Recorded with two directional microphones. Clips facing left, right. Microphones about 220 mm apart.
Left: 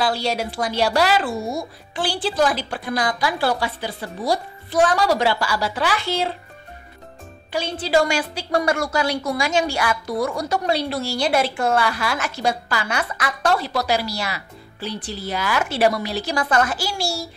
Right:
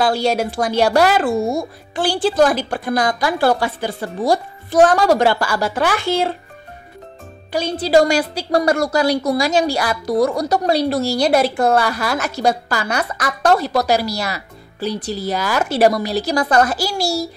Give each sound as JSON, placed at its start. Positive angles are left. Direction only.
{"t": 0.0, "sound": "speech", "side_deg": -45}
{"t": 7.5, "sound": "a woman's voice", "side_deg": -40}